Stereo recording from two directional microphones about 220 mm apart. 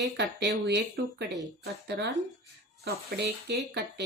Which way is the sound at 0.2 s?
50° right (ahead or behind).